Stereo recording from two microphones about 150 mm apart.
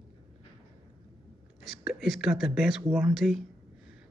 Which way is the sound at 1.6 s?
5° right (ahead or behind).